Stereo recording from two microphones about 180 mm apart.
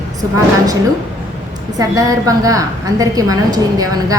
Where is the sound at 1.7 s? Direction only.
20° right (ahead or behind).